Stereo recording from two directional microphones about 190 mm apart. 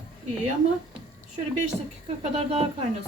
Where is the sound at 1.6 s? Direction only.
35° right (ahead or behind).